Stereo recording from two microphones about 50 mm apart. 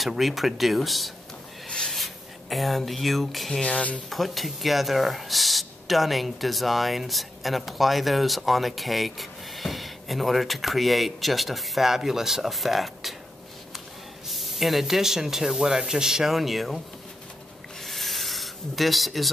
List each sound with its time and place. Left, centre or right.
0.0 s speech: centre
3.6 s speech: left
4.1 s speech: centre
14.2 s speech: centre
17.7 s rub: centre